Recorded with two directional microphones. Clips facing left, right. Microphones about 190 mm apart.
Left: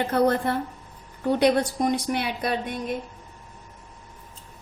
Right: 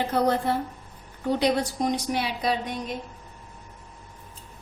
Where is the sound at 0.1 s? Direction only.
55° left (ahead or behind).